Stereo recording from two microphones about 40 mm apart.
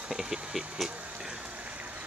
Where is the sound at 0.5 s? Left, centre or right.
Centre.